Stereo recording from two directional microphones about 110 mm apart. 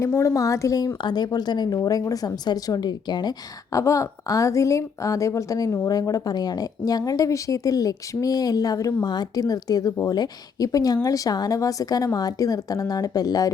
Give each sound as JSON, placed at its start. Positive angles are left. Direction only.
{"t": 0.0, "sound": "a woman's voice", "side_deg": 25}